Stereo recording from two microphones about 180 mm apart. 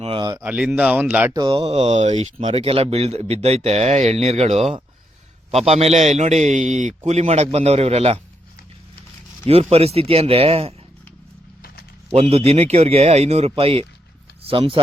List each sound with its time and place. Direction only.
0.0 s speech: 25° right (ahead or behind)
0.4 s speech: 5° right (ahead or behind)
1.4 s speech: 30° right (ahead or behind)
9.5 s speech: 35° right (ahead or behind)
12.1 s speech: 35° right (ahead or behind)